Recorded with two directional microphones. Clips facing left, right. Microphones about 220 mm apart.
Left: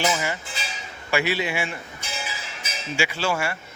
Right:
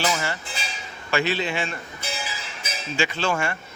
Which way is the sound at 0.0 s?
15° left (ahead or behind).